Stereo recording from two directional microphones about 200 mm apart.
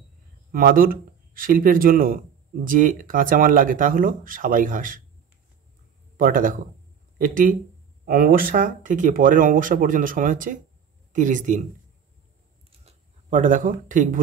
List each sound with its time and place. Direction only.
0.5 s speech: 45° right (ahead or behind)
6.1 s speech: 45° right (ahead or behind)
12.8 s speech: 40° right (ahead or behind)